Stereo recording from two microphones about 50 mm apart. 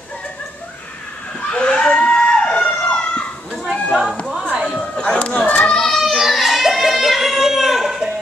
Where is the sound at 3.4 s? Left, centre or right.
Centre.